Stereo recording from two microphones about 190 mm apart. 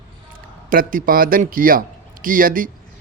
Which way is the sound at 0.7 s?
50° right (ahead or behind).